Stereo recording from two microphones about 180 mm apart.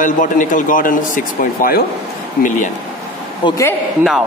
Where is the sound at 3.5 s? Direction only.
20° left (ahead or behind).